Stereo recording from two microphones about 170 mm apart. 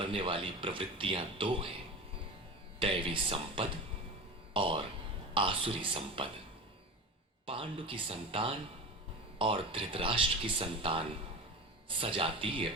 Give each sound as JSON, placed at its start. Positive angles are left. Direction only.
{"t": 0.0, "sound": "speech", "side_deg": -30}
{"t": 2.7, "sound": "speech", "side_deg": -30}
{"t": 7.4, "sound": "speech", "side_deg": -30}